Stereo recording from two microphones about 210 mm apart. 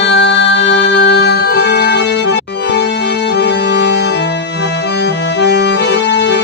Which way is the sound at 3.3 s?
55° left (ahead or behind).